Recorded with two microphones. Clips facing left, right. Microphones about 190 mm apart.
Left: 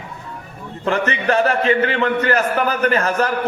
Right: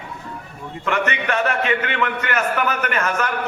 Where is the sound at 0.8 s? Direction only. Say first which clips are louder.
Left 4 dB; 35° left (ahead or behind).